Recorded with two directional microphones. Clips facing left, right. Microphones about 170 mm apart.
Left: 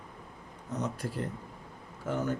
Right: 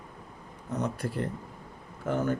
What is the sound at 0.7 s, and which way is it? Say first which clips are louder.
Speech: right 3 dB; 60° right (ahead or behind).